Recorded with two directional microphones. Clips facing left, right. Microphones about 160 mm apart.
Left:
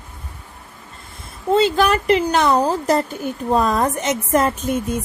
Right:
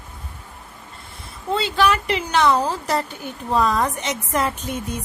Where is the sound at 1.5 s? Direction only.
45° left (ahead or behind).